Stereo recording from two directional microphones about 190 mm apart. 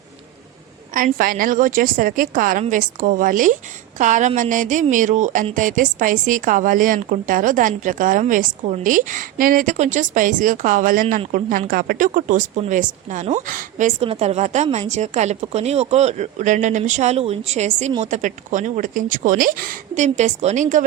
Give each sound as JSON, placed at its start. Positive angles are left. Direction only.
{"t": 0.9, "sound": "a woman's voice", "side_deg": -45}